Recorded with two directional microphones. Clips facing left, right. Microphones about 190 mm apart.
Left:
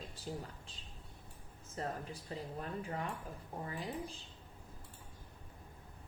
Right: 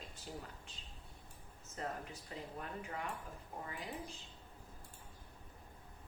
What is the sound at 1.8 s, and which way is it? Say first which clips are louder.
Speech: left 3 dB; 35° left (ahead or behind).